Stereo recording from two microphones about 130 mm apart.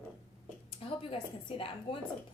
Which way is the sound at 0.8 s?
45° left (ahead or behind).